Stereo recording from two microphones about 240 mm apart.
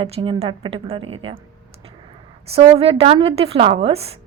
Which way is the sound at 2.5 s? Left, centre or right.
Right.